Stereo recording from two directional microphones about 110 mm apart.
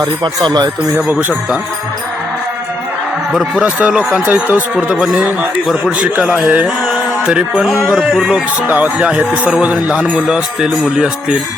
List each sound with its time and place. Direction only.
0.4 s speech: 40° right (ahead or behind)
0.9 s a man's voice: 10° right (ahead or behind)
3.3 s a man's voice: 10° right (ahead or behind)
6.2 s a man's voice: 5° right (ahead or behind)